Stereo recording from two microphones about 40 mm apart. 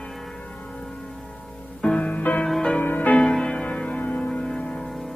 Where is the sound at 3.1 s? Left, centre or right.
Centre.